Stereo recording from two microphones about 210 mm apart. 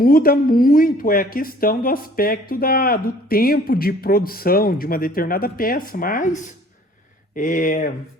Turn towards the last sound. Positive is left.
turn(degrees=40)  # may be behind; listen again after turning